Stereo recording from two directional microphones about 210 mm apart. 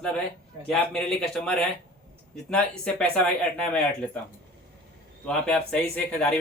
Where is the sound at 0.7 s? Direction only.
Centre (ahead or behind).